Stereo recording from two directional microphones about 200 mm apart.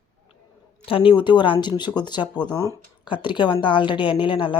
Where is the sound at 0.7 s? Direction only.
25° left (ahead or behind).